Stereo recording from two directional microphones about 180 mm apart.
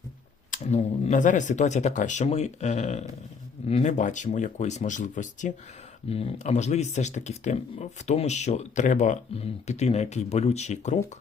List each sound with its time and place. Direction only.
0.5 s speech: 40° left (ahead or behind)
6.1 s speech: 35° left (ahead or behind)